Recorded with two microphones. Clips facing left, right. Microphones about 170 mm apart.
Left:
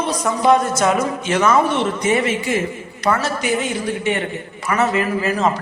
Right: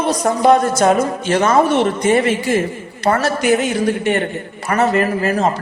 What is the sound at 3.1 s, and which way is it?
A man's voice, 50° right (ahead or behind).